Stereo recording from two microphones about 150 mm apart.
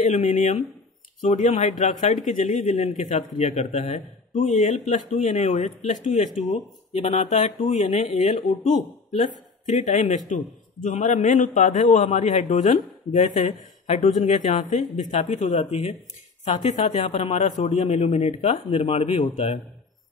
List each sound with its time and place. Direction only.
0.0 s speech: 50° left (ahead or behind)